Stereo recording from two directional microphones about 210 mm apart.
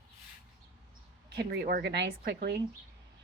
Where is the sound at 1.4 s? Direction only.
55° right (ahead or behind).